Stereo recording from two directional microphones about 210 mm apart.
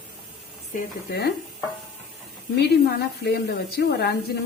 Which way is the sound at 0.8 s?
50° left (ahead or behind).